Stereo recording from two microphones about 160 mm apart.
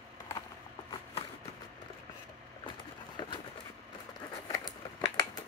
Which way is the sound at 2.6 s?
30° left (ahead or behind).